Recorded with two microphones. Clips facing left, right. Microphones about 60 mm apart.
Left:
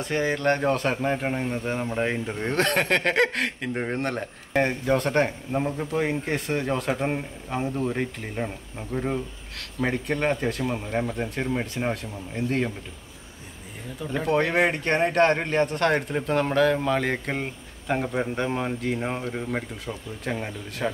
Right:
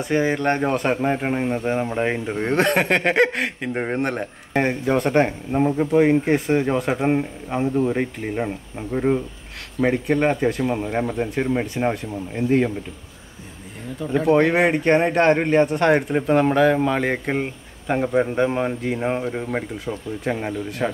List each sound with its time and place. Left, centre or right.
0.0 s speech: centre
14.1 s speech: centre